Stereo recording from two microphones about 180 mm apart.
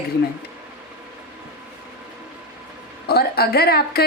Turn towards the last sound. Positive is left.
turn(degrees=60)  # may be behind; listen again after turning